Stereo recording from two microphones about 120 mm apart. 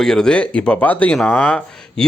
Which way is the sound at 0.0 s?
5° left (ahead or behind).